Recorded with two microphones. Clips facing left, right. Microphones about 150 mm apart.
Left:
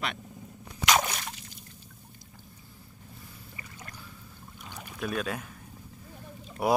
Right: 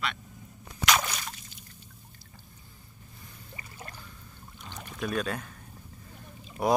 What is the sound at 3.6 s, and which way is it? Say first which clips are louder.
Boat: right 2 dB; 30° right (ahead or behind).